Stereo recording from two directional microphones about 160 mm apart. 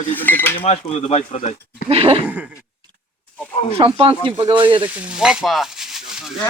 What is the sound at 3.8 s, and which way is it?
Speech, 35° right (ahead or behind).